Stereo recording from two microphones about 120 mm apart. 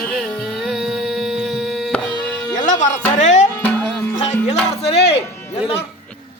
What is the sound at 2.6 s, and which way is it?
Music, 90° left.